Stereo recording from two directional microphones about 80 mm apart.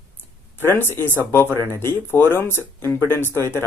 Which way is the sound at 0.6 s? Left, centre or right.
Left.